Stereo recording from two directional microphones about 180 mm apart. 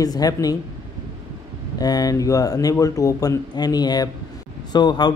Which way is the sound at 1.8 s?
20° left (ahead or behind).